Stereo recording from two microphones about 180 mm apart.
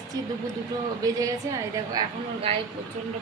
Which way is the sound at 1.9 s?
30° right (ahead or behind).